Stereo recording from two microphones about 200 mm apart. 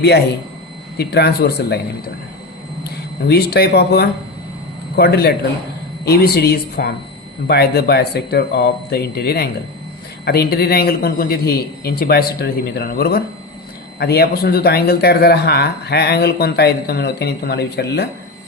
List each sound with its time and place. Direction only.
0.9 s speech: 50° left (ahead or behind)
3.2 s speech: 50° left (ahead or behind)